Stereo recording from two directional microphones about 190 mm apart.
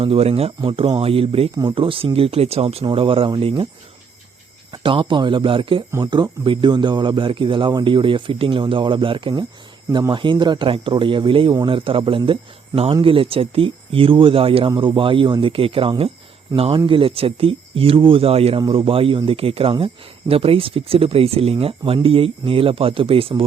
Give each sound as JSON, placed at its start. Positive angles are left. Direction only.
{"t": 0.0, "sound": "speech", "side_deg": -30}
{"t": 4.7, "sound": "speech", "side_deg": -25}